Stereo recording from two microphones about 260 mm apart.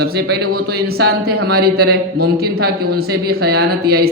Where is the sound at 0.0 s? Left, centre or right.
Right.